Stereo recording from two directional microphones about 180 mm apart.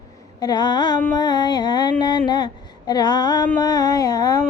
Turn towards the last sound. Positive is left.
turn(degrees=20)  # may be behind; listen again after turning